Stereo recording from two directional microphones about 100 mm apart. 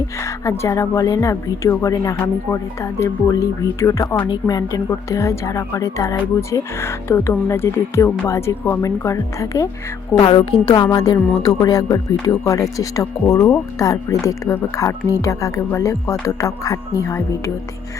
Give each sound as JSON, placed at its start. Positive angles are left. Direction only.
{"t": 0.2, "sound": "a woman's voice", "side_deg": 30}
{"t": 10.2, "sound": "a woman's voice", "side_deg": 50}